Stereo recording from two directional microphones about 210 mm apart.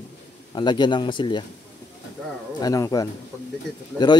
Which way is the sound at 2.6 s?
15° left (ahead or behind).